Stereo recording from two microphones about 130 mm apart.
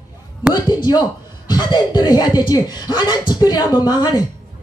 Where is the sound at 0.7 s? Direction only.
35° left (ahead or behind).